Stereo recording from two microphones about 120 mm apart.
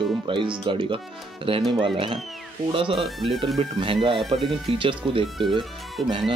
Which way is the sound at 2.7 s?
50° right (ahead or behind).